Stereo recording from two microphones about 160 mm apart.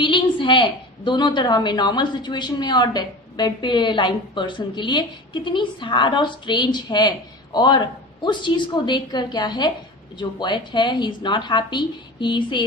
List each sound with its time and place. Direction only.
0.0 s a woman's voice: 30° left (ahead or behind)